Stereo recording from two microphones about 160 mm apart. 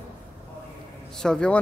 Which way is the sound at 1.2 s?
5° left (ahead or behind).